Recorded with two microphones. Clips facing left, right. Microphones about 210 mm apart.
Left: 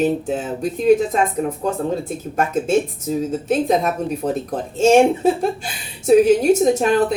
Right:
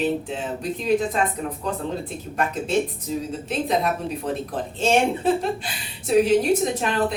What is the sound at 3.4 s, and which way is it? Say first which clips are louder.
Speech: left 5 dB; 45° left (ahead or behind).